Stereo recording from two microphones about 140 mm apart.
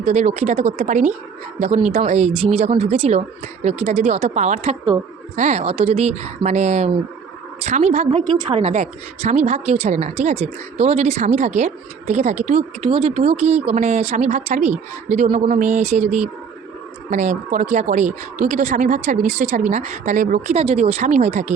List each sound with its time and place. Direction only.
0.0 s a woman's voice: 55° right (ahead or behind)
8.4 s a woman's voice: 40° right (ahead or behind)
15.4 s speech: 65° right (ahead or behind)
20.6 s a woman's voice: 45° right (ahead or behind)